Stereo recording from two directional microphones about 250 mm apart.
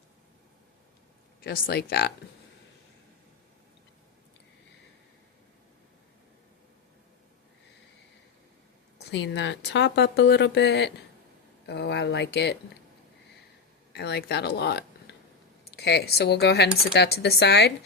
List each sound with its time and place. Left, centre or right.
1.5 s speech: left
9.0 s speech: left
13.9 s speech: left